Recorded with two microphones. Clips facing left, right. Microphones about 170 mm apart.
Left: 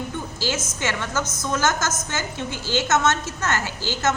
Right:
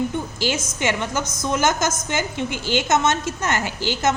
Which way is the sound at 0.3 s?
15° right (ahead or behind).